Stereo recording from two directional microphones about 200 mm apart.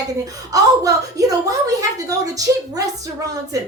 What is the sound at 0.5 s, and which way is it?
A woman's voice, 15° right (ahead or behind).